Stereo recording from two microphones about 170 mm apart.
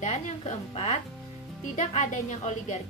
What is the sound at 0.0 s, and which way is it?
A woman's voice, 40° left (ahead or behind).